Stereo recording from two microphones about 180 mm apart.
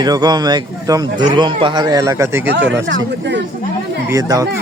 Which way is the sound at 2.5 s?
75° right (ahead or behind).